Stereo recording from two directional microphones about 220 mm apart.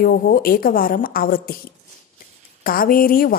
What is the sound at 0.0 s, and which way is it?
A woman's voice, 40° left (ahead or behind).